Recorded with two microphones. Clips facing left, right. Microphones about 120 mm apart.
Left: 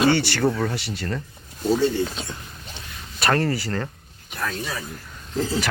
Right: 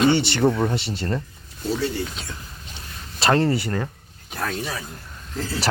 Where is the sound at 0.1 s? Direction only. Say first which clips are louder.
Right 2 dB; 20° right (ahead or behind).